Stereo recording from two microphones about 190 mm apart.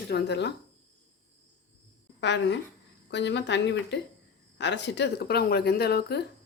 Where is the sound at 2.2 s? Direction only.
65° left (ahead or behind).